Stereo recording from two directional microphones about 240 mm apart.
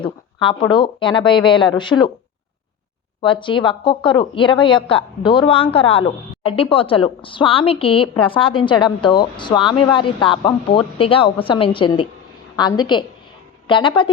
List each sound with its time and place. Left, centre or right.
0.0 s speech: centre
3.2 s a woman's voice: left